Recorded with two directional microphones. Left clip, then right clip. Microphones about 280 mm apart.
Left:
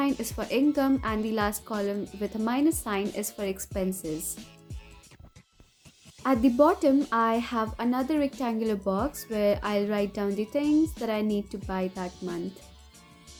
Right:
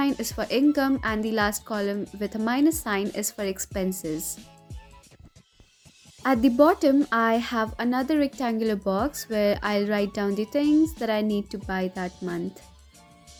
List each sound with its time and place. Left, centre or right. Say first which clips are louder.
0.2 s speech: right 3 dB; right
4.0 s speech: right 3 dB; centre
6.2 s speech: right 3 dB; right
10.6 s speech: right 3 dB; centre
11.0 s speech: right 3 dB; right
12.4 s speech: right 3 dB; centre